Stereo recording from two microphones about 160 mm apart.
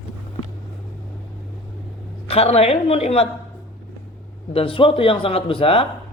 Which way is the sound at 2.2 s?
40° left (ahead or behind).